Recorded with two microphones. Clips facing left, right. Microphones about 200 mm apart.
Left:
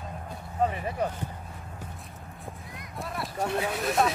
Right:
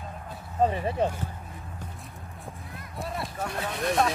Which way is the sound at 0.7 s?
30° right (ahead or behind).